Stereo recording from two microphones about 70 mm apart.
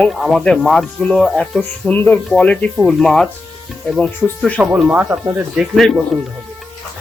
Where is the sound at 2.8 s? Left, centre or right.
Centre.